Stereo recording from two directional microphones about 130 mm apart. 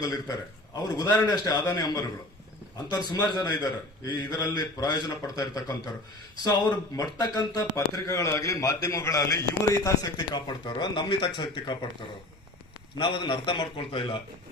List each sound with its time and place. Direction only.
0.0 s a man's voice: 30° left (ahead or behind)
13.0 s a man's voice: 40° left (ahead or behind)